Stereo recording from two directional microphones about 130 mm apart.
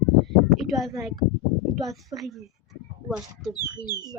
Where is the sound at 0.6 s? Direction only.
Centre (ahead or behind).